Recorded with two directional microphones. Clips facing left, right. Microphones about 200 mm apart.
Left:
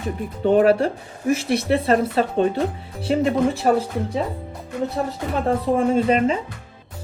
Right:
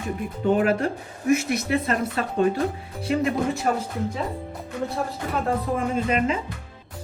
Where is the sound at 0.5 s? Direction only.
35° left (ahead or behind).